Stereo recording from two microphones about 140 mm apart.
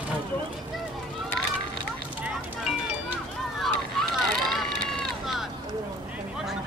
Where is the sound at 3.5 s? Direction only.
Centre (ahead or behind).